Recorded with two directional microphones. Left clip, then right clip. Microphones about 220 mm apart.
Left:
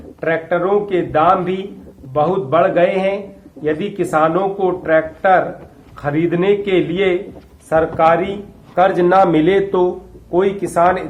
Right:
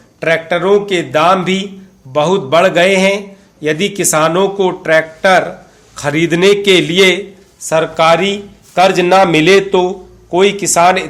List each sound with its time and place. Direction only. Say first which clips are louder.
0.2 s a man's voice: right 4 dB; 40° right (ahead or behind); by 9.9 s 25° right (ahead or behind)
10.6 s a man's voice: right 3 dB; 40° right (ahead or behind)